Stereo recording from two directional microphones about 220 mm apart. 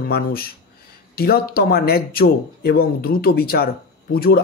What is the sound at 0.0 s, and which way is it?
Speech, 45° left (ahead or behind).